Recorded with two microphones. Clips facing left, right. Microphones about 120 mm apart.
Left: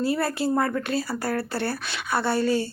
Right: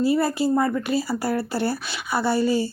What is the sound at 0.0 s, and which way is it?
Speech, centre (ahead or behind).